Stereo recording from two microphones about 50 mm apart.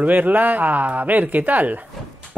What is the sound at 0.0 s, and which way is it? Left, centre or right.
Speech, right.